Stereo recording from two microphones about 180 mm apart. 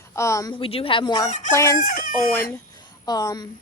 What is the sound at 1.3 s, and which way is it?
Chicken, 45° left (ahead or behind).